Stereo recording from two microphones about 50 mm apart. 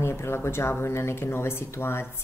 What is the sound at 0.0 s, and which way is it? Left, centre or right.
A woman's voice, left.